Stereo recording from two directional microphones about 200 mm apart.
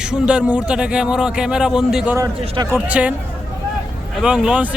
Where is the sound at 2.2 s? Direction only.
15° right (ahead or behind).